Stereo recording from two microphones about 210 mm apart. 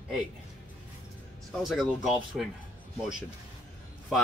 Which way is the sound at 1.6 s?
Centre (ahead or behind).